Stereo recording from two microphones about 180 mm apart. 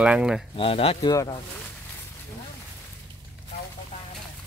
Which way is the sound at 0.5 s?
30° left (ahead or behind).